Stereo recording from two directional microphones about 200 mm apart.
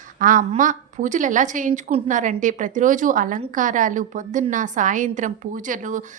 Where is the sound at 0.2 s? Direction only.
40° right (ahead or behind).